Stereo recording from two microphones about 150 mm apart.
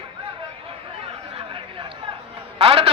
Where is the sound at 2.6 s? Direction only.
40° right (ahead or behind).